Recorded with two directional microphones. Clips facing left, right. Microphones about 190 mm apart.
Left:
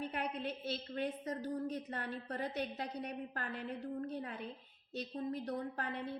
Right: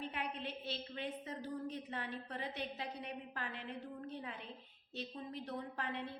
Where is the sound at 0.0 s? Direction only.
45° left (ahead or behind).